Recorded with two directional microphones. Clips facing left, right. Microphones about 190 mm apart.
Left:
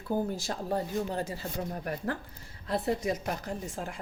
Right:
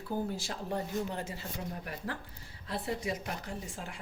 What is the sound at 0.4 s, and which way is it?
Speech, 35° left (ahead or behind).